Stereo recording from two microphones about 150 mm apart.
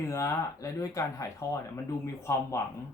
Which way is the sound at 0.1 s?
20° left (ahead or behind).